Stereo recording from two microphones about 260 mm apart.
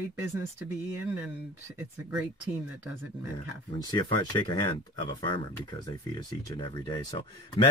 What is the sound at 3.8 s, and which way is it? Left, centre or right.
Speech, centre.